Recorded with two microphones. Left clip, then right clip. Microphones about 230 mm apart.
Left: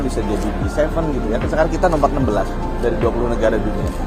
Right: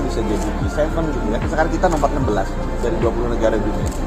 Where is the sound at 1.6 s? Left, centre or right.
Left.